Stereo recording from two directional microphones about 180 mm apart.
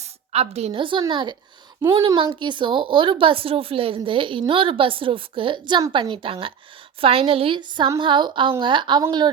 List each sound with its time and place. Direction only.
0.0 s a woman's voice: 35° right (ahead or behind)